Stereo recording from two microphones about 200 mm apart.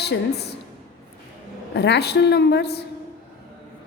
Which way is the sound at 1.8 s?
55° left (ahead or behind).